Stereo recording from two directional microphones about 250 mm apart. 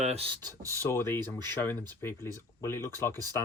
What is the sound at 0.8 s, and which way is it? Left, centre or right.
Speech, centre.